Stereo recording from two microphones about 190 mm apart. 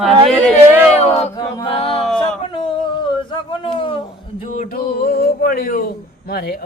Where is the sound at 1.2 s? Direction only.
30° left (ahead or behind).